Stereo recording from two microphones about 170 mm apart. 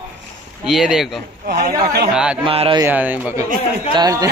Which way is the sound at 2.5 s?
35° right (ahead or behind).